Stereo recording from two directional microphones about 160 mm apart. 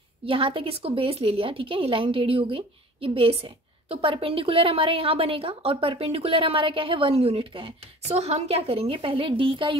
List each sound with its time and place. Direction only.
0.2 s a woman's voice: 35° right (ahead or behind)